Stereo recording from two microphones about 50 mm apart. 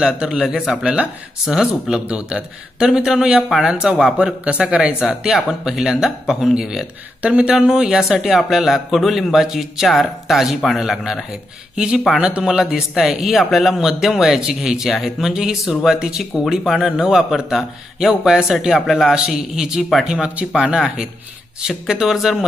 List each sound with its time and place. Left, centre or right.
0.0 s speech: centre
0.4 s a man's voice: centre
5.3 s a man's voice: centre
7.2 s a man's voice: right; by 11.2 s centre
11.7 s a man's voice: right